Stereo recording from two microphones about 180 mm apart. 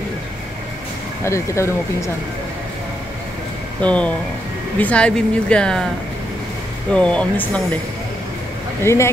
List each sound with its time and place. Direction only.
1.2 s speech: 15° left (ahead or behind)
3.8 s speech: 5° left (ahead or behind)
6.9 s speech: 5° left (ahead or behind)
8.8 s speech: 15° left (ahead or behind)